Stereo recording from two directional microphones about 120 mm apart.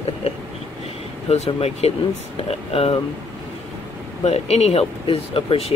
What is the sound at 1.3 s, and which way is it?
Speech, 65° left (ahead or behind).